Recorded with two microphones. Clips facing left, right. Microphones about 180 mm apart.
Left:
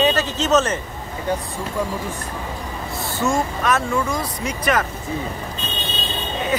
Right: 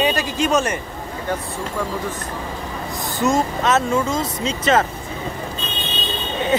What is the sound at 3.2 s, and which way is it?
Speech, 20° right (ahead or behind).